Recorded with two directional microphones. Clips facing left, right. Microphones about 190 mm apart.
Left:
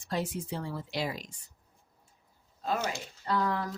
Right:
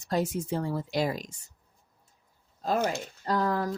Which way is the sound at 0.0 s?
40° right (ahead or behind).